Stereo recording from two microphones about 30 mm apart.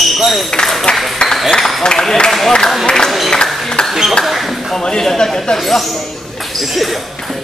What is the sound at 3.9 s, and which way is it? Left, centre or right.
Speech, centre.